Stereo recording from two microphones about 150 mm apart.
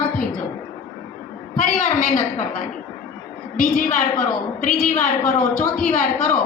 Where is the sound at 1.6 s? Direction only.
55° left (ahead or behind).